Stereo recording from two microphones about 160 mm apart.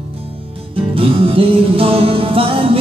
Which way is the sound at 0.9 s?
35° right (ahead or behind).